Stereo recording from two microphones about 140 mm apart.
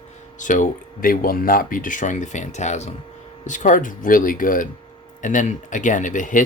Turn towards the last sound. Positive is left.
turn(degrees=70)  # may be behind; listen again after turning